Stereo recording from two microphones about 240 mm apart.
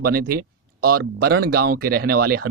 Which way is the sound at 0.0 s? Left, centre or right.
Right.